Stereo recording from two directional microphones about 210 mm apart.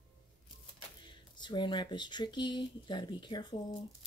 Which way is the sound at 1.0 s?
20° left (ahead or behind).